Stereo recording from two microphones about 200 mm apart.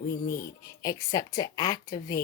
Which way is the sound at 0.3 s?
15° left (ahead or behind).